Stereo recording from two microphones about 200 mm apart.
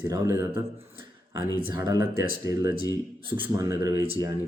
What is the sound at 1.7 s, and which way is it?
A man's voice, 20° right (ahead or behind).